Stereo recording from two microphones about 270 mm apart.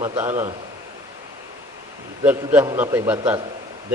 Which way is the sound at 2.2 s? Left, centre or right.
Centre.